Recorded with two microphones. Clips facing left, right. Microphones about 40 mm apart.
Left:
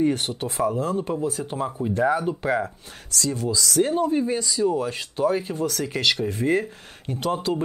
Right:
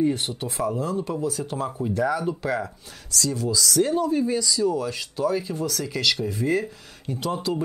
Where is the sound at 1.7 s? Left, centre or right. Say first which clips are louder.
Left 1 dB; centre.